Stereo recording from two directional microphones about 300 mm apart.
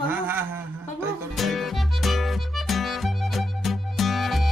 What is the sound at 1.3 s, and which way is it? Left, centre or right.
Music, centre.